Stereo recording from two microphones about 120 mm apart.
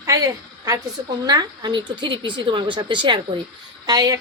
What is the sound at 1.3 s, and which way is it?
A woman's voice, 35° right (ahead or behind).